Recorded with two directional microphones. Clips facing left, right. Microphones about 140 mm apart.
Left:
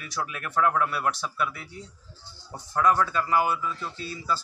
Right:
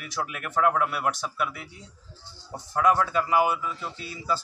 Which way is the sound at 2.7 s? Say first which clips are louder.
Right 1 dB; 15° right (ahead or behind).